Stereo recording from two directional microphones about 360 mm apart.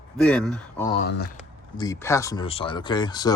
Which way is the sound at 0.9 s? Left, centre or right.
Left.